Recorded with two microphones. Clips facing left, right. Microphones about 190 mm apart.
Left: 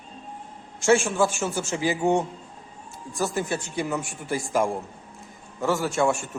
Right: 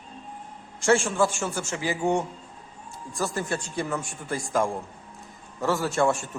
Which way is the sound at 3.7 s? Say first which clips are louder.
Left 2 dB; 10° left (ahead or behind).